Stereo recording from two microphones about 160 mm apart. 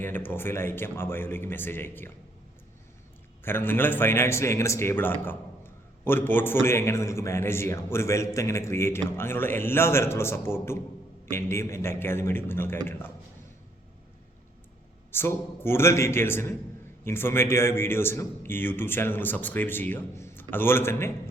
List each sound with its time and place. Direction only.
0.0 s a man's voice: 10° left (ahead or behind)
3.4 s a man's voice: 15° left (ahead or behind)
15.1 s a man's voice: 15° left (ahead or behind)